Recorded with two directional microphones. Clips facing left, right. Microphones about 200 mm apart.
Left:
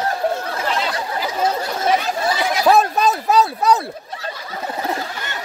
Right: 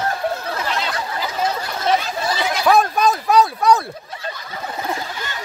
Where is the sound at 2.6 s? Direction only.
25° left (ahead or behind).